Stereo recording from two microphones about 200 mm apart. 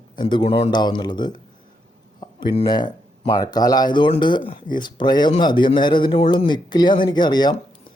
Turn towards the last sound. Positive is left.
turn(degrees=20)  # may be behind; listen again after turning